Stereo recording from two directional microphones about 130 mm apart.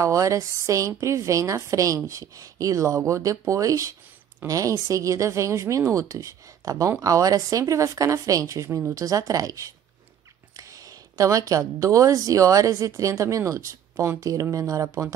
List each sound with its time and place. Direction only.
0.0 s a woman's voice: 25° right (ahead or behind)